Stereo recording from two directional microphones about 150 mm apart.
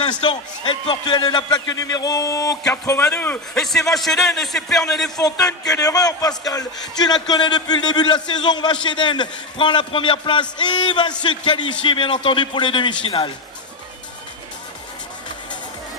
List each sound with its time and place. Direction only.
0.0 s a man's voice: 30° left (ahead or behind)
3.1 s a man's voice: 10° left (ahead or behind)
5.1 s a man's voice: 25° left (ahead or behind)